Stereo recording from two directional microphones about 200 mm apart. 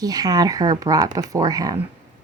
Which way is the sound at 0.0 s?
20° right (ahead or behind).